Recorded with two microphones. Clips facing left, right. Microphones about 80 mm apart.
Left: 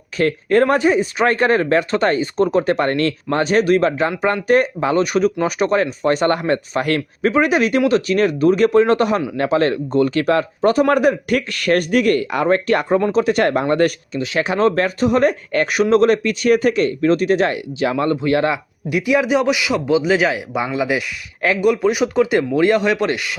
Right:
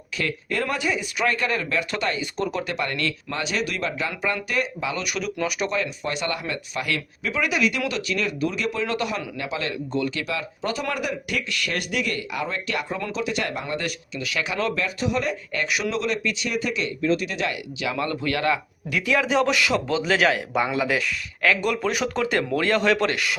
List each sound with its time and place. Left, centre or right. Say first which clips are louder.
0.2 s speech: left 12 dB; left
14.2 s speech: left 9 dB; left; by 23.3 s centre